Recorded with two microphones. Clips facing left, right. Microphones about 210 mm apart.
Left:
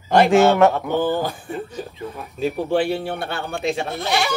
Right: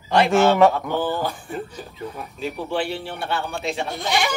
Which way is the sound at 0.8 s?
15° left (ahead or behind).